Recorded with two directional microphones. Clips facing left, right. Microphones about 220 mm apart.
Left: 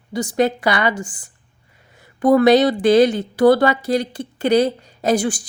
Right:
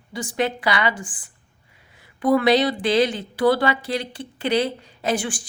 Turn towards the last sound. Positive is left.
turn(degrees=40)  # may be behind; listen again after turning